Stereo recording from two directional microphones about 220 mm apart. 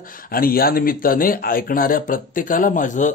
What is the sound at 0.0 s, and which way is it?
Speech, 40° left (ahead or behind).